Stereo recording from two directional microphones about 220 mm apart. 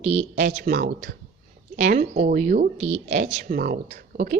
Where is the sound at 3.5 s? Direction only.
45° right (ahead or behind).